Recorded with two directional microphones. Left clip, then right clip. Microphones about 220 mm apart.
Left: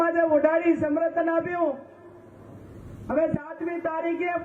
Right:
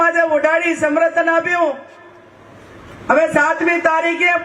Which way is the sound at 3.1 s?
10° right (ahead or behind).